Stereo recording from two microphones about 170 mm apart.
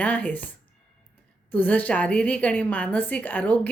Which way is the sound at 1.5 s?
10° left (ahead or behind).